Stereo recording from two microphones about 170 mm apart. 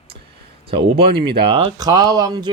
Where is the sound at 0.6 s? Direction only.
35° right (ahead or behind).